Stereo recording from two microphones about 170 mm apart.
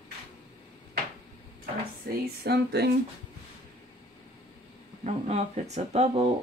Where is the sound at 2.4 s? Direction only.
75° right (ahead or behind).